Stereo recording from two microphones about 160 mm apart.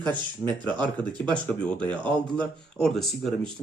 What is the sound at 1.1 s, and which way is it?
Speech, 30° right (ahead or behind).